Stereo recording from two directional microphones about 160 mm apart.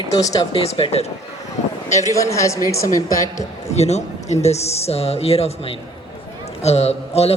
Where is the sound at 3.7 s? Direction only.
45° left (ahead or behind).